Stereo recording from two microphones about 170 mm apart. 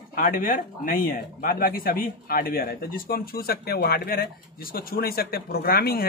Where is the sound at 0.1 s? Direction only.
55° left (ahead or behind).